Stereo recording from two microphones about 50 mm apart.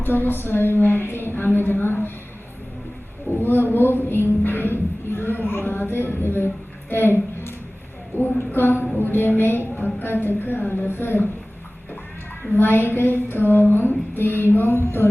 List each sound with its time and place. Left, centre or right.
0.0 s a woman's voice: left
3.3 s music: left
6.9 s a sound: left
9.0 s a woman's voice: left
12.5 s a woman's voice: left